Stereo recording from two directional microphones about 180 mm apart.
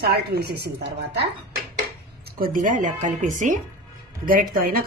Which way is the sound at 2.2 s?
50° right (ahead or behind).